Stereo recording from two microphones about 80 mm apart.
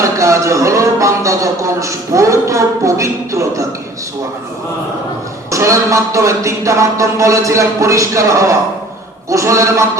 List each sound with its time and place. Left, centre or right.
0.0 s a man's voice: right
5.5 s a man's voice: right